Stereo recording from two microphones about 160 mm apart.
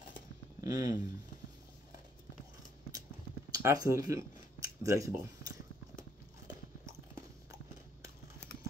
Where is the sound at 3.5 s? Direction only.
20° right (ahead or behind).